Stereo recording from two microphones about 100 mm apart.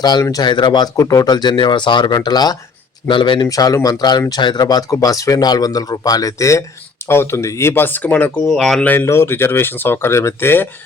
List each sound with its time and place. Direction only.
0.0 s speech: 40° left (ahead or behind)
0.9 s speech: 35° left (ahead or behind)
3.1 s speech: 55° left (ahead or behind)
3.4 s speech: 35° left (ahead or behind); by 8.5 s 15° left (ahead or behind)
8.5 s speech: centre (ahead or behind)
8.8 s speech: 20° left (ahead or behind)